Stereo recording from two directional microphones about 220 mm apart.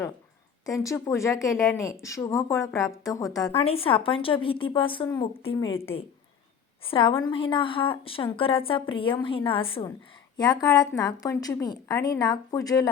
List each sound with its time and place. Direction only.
0.6 s speech: 15° left (ahead or behind)
3.5 s a woman's voice: 25° left (ahead or behind)
6.8 s a woman's voice: 25° left (ahead or behind)